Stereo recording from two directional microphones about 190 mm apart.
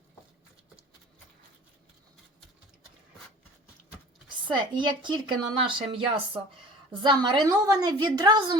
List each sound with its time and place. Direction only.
4.4 s speech: 25° right (ahead or behind)